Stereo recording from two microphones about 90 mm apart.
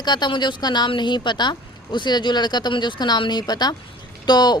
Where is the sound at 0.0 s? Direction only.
55° left (ahead or behind).